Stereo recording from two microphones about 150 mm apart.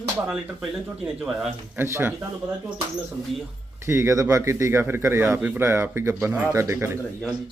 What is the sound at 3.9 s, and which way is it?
Speech, 20° right (ahead or behind).